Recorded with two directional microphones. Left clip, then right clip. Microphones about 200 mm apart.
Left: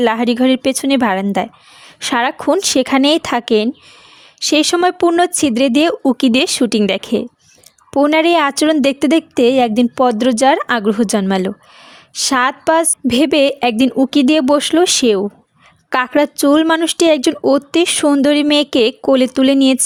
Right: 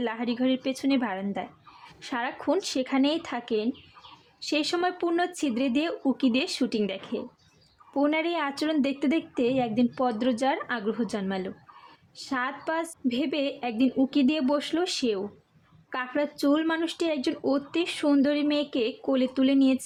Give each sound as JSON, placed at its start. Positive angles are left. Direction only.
{"t": 0.0, "sound": "speech", "side_deg": 50}